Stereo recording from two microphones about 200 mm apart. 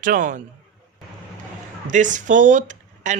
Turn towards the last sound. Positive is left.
turn(degrees=-40)  # may be behind; listen again after turning